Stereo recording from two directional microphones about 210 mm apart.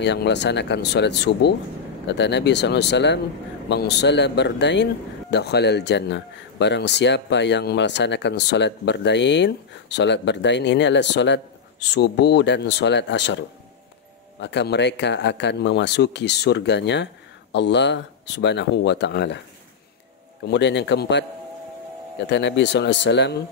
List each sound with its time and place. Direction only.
0.0 s speech: 55° left (ahead or behind)
14.4 s speech: 55° left (ahead or behind)
20.4 s speech: 55° left (ahead or behind)